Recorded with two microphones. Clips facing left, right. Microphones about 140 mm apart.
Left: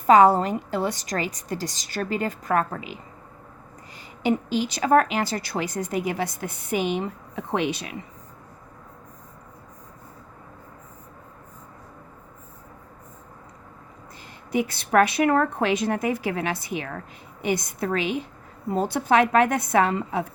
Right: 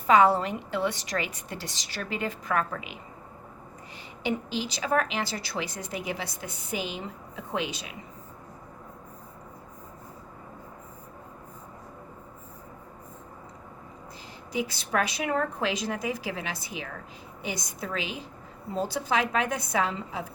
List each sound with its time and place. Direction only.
0.1 s a woman's voice: 40° left (ahead or behind)
4.2 s a woman's voice: 45° left (ahead or behind); by 7.9 s 65° left (ahead or behind)
14.5 s a woman's voice: 55° left (ahead or behind)